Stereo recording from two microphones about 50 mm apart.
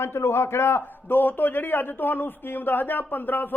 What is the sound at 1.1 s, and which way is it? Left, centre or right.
Speech, left.